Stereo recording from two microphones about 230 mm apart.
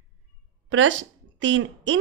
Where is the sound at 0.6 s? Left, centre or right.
Right.